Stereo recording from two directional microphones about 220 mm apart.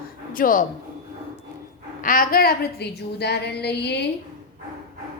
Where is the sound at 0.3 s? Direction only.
40° left (ahead or behind).